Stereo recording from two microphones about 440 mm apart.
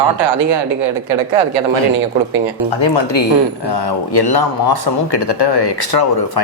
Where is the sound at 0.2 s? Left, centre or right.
Right.